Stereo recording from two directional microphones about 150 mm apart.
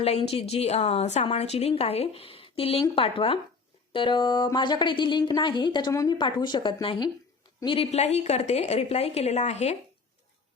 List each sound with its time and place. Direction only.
0.0 s a woman's voice: 40° left (ahead or behind)